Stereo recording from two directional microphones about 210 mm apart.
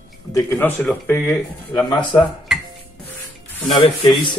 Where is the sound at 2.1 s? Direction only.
Centre (ahead or behind).